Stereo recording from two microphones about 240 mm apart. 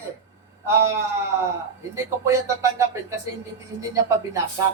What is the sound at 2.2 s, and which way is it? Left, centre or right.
Speech, centre.